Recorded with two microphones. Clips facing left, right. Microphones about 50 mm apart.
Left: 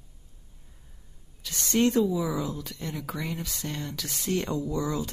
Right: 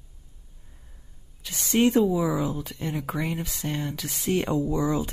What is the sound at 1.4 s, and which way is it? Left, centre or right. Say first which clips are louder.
Speech: right 2 dB; centre.